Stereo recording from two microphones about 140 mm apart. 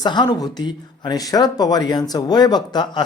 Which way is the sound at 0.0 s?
30° left (ahead or behind).